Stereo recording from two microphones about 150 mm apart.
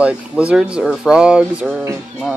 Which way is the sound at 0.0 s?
10° right (ahead or behind).